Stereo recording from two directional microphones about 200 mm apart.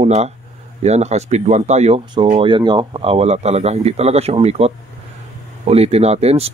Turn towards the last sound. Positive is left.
turn(degrees=-30)  # may be behind; listen again after turning